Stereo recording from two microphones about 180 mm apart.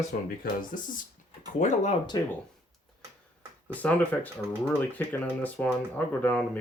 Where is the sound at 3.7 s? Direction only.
10° left (ahead or behind).